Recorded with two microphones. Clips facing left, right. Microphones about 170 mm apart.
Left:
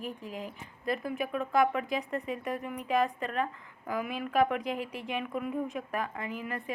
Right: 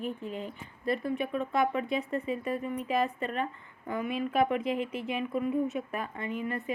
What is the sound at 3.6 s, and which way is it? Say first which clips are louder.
Speech: even; 90° left.